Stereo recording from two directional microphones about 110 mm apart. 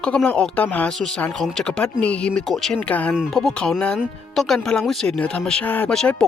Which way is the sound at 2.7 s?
15° left (ahead or behind).